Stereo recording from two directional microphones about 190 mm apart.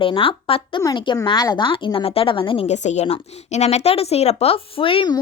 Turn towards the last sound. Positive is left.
turn(degrees=25)  # may be behind; listen again after turning